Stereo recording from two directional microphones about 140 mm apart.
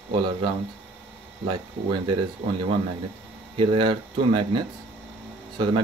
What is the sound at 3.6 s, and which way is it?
Speech, 35° right (ahead or behind).